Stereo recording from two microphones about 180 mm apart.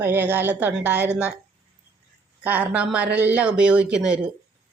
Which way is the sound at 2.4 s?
10° right (ahead or behind).